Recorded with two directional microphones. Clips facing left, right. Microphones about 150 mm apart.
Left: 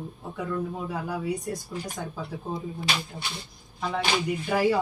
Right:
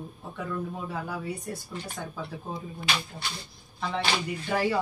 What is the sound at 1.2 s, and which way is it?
Speech, 15° left (ahead or behind).